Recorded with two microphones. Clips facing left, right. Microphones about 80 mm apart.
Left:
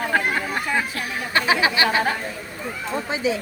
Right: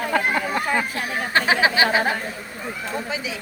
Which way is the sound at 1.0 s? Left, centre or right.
Right.